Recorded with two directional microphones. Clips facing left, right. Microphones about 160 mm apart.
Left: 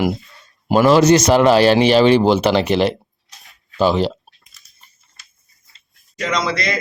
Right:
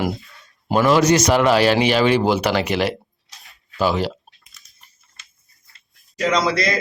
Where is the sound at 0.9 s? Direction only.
30° left (ahead or behind).